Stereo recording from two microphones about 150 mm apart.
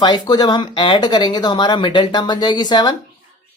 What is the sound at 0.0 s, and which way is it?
Speech, 30° left (ahead or behind).